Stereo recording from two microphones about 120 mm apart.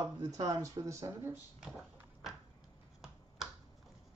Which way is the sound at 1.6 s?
5° right (ahead or behind).